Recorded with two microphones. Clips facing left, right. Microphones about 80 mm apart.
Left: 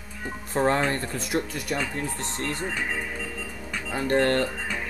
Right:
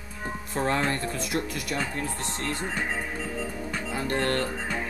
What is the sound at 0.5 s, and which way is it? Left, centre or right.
Speech, left.